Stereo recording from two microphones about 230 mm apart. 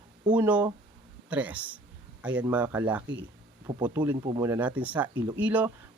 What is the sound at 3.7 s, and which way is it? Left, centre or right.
Speech, centre.